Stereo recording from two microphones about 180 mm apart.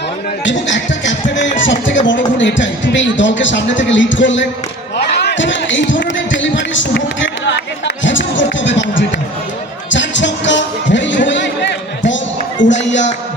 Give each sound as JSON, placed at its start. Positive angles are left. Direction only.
{"t": 0.7, "sound": "speech", "side_deg": 90}
{"t": 9.9, "sound": "music", "side_deg": 85}
{"t": 12.7, "sound": "speech", "side_deg": 85}